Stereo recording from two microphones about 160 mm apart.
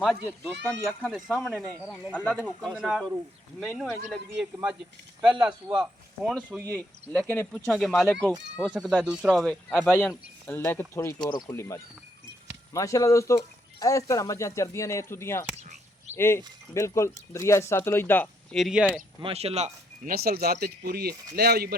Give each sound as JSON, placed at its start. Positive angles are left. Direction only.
{"t": 0.0, "sound": "speech", "side_deg": 0}
{"t": 2.3, "sound": "speech", "side_deg": -10}
{"t": 5.4, "sound": "speech", "side_deg": -10}
{"t": 6.7, "sound": "speech", "side_deg": 10}
{"t": 10.0, "sound": "speech", "side_deg": 15}
{"t": 18.5, "sound": "speech", "side_deg": 0}
{"t": 19.2, "sound": "speech", "side_deg": -40}
{"t": 20.1, "sound": "speech", "side_deg": -70}